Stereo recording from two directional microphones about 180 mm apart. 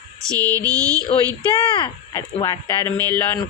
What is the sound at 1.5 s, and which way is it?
Speech, 25° left (ahead or behind).